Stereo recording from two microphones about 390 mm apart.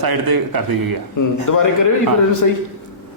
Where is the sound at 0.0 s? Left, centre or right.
Right.